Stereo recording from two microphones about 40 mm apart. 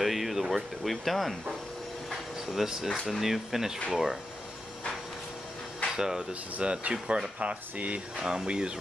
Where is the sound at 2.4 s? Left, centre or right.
Centre.